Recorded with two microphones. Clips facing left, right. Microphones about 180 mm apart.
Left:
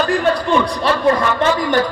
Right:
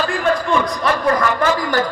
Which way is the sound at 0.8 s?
25° left (ahead or behind).